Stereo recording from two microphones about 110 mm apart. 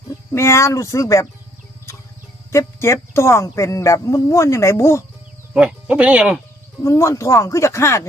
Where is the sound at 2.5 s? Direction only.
25° left (ahead or behind).